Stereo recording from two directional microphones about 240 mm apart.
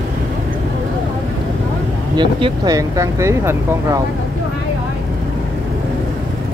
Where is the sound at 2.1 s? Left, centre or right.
Centre.